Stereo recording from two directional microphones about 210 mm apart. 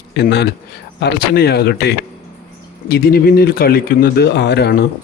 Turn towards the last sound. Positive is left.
turn(degrees=50)  # may be behind; listen again after turning